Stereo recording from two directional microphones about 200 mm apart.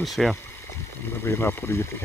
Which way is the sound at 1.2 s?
10° left (ahead or behind).